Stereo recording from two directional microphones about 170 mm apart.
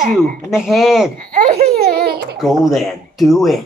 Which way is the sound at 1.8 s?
65° right (ahead or behind).